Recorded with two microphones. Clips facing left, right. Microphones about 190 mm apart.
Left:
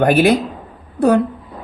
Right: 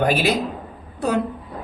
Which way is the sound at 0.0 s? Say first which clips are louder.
Left 7 dB; 55° left (ahead or behind).